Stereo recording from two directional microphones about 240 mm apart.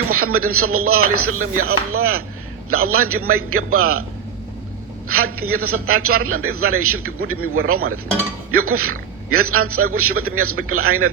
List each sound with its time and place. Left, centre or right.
0.1 s a man's voice: right
5.0 s a man's voice: right